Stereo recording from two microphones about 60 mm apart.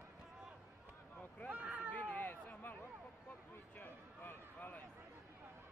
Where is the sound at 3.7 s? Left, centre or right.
Left.